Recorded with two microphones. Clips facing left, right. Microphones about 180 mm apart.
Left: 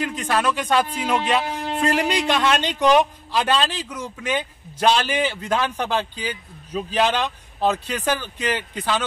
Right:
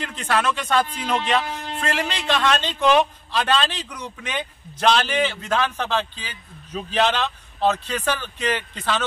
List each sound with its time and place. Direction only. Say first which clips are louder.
0.0 s speech: left 1 dB; 15° left (ahead or behind)